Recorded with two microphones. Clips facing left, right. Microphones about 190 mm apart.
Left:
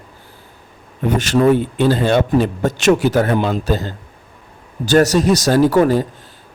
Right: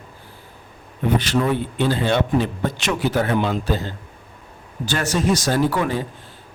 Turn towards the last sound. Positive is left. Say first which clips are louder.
# left 8 dB
turn(degrees=40)  # may be behind; listen again after turning